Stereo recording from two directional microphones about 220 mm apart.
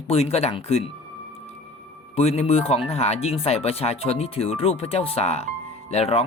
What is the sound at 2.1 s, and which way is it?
Speech, 30° left (ahead or behind).